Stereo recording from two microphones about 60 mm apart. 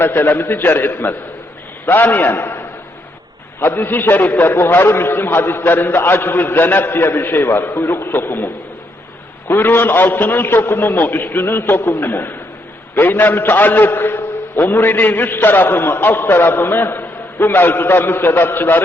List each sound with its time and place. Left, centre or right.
0.0 s a man's voice: left
9.5 s a man's voice: left